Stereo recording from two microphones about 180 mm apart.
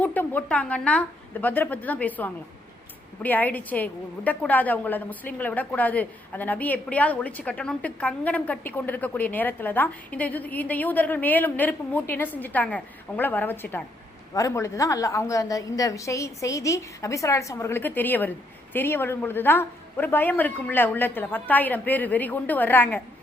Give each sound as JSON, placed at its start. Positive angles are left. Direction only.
{"t": 0.0, "sound": "a woman's voice", "side_deg": 10}